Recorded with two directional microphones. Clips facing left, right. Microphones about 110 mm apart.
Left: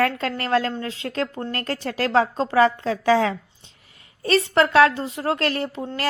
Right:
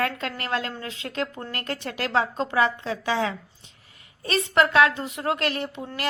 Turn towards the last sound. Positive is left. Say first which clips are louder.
# left 4 dB
turn(degrees=35)  # may be behind; listen again after turning